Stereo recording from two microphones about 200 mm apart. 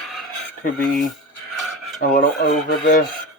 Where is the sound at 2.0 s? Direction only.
45° left (ahead or behind).